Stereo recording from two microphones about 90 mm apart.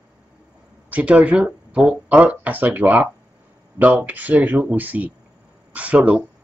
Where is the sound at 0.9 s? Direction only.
15° right (ahead or behind).